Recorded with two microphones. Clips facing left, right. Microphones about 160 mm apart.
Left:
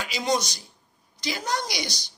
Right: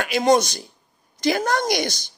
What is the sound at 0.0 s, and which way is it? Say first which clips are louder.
A woman's voice: right 9 dB; 55° right (ahead or behind).